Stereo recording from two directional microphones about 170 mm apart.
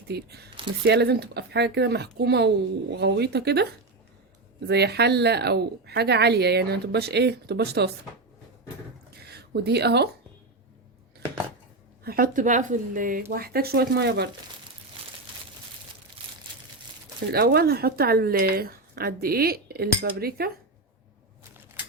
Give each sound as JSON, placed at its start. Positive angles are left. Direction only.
{"t": 0.1, "sound": "speech", "side_deg": -70}
{"t": 4.7, "sound": "speech", "side_deg": -75}
{"t": 9.0, "sound": "a sound", "side_deg": -70}
{"t": 12.0, "sound": "speech", "side_deg": -60}
{"t": 17.3, "sound": "speech", "side_deg": -65}